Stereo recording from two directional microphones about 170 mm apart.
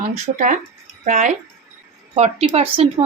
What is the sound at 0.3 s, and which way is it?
Speech, 45° right (ahead or behind).